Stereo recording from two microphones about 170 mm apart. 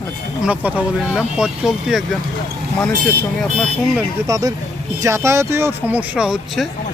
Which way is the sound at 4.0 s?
20° right (ahead or behind).